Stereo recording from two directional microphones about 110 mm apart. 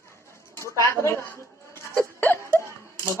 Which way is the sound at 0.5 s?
25° left (ahead or behind).